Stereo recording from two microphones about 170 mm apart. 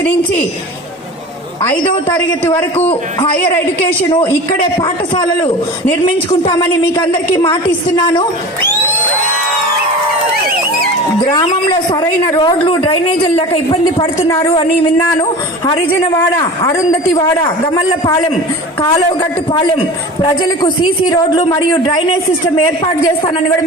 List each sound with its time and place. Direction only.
2.0 s a man's voice: 10° left (ahead or behind)
4.8 s speech: 20° left (ahead or behind)
7.4 s speech: 30° left (ahead or behind)
11.7 s speech: 25° left (ahead or behind)
15.2 s a man's voice: 20° left (ahead or behind)
18.9 s speech: 30° left (ahead or behind)